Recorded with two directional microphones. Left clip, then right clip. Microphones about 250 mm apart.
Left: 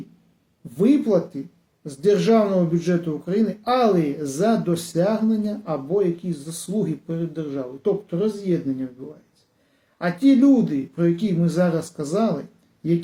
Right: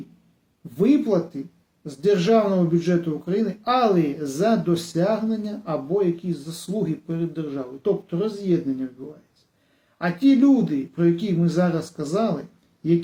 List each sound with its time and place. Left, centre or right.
0.8 s speech: centre
10.0 s speech: centre